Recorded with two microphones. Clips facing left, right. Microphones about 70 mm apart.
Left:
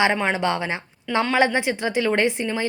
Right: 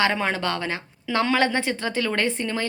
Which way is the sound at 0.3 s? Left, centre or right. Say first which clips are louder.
Left 3 dB; centre.